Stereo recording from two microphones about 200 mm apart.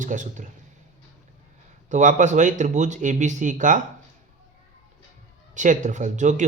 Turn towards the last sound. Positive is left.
turn(degrees=-35)  # may be behind; listen again after turning